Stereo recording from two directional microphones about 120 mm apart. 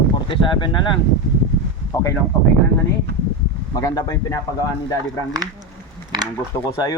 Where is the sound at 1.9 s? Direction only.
25° left (ahead or behind).